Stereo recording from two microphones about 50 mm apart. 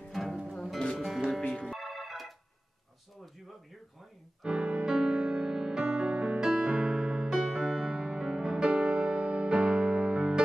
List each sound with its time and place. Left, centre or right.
0.1 s music: centre
4.4 s music: centre